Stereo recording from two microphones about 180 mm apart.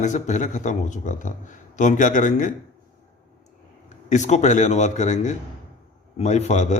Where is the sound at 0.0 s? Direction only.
45° left (ahead or behind).